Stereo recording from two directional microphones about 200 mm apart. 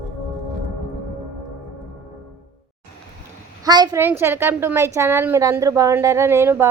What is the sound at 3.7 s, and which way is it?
A woman's voice, 20° right (ahead or behind).